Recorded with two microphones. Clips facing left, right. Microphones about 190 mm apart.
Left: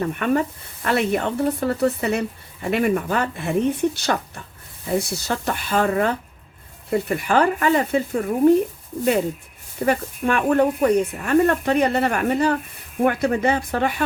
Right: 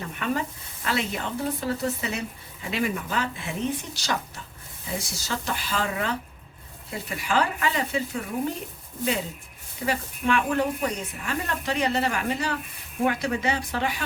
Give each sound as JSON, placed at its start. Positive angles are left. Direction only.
{"t": 0.0, "sound": "speech", "side_deg": 55}
{"t": 9.8, "sound": "speech", "side_deg": 50}